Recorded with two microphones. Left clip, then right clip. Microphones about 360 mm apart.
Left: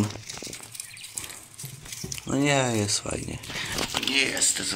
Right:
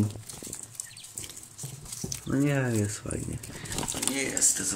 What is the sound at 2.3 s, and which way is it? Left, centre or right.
Speech, centre.